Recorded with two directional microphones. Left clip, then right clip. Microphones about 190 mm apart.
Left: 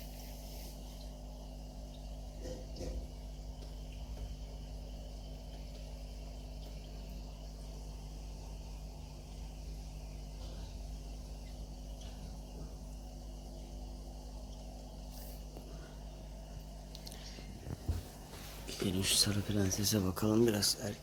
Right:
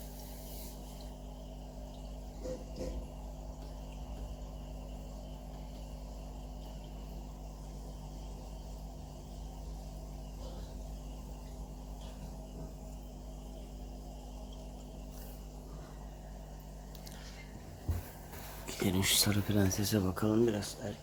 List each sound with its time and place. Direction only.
18.7 s speech: 15° right (ahead or behind); by 20.4 s 5° left (ahead or behind)
20.4 s speech: 15° left (ahead or behind)